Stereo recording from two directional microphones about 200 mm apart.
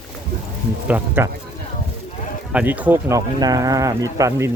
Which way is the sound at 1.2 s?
10° right (ahead or behind).